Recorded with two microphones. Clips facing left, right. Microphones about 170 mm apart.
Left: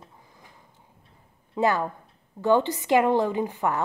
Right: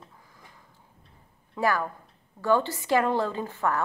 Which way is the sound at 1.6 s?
20° left (ahead or behind).